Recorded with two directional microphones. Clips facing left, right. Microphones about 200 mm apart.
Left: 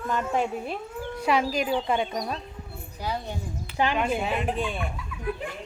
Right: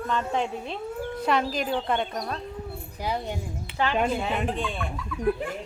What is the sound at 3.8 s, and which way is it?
Speech, 15° left (ahead or behind).